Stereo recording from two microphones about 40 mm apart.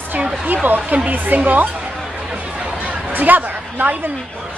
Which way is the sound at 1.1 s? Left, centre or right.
Right.